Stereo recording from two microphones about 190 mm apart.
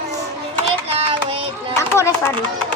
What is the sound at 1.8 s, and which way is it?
Children playing, 15° left (ahead or behind).